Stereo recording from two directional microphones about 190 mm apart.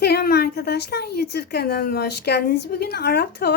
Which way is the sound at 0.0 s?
55° left (ahead or behind).